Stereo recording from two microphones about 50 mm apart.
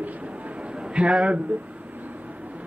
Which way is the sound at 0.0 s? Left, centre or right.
Right.